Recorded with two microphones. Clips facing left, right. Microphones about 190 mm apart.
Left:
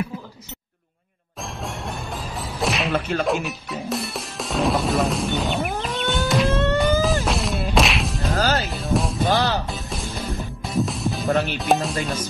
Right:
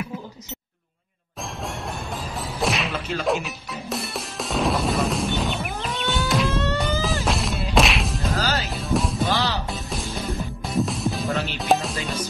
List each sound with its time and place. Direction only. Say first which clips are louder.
1.6 s music: even; centre (ahead or behind)
2.9 s whip: left 5 dB; 55° left (ahead or behind)
3.3 s music: left 1 dB; centre (ahead or behind)
6.5 s music: left 4 dB; 55° left (ahead or behind)
6.8 s music: left 5 dB; centre (ahead or behind)
7.2 s a sound: left 1 dB; centre (ahead or behind)
7.7 s whack: right 1 dB; centre (ahead or behind)
8.4 s music: left 5 dB; 50° left (ahead or behind)
8.6 s music: left 1 dB; centre (ahead or behind)
9.3 s music: left 6 dB; 50° left (ahead or behind)
9.7 s music: even; centre (ahead or behind)